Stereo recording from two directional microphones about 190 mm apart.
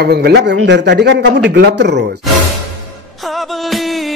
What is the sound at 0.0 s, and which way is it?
Speech, 60° right (ahead or behind).